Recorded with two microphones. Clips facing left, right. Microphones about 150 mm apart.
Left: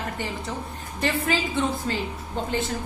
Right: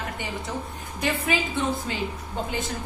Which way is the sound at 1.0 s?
Centre (ahead or behind).